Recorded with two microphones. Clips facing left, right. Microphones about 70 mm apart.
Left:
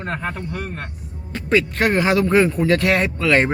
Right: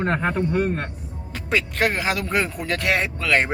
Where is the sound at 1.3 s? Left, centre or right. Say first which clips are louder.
Left 5 dB; centre.